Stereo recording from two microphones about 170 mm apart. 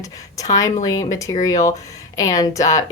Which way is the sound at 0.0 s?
20° left (ahead or behind).